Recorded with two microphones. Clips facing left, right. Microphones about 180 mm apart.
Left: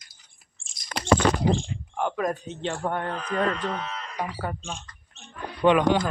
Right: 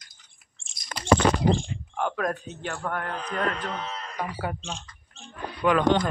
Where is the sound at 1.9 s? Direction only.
15° left (ahead or behind).